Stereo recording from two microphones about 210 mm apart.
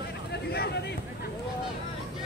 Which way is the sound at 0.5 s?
50° left (ahead or behind).